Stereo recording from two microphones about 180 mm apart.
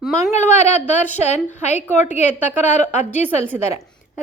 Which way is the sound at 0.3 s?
40° left (ahead or behind).